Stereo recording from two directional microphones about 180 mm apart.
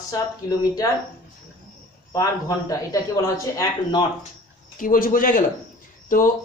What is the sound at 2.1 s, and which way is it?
A man's voice, 20° left (ahead or behind).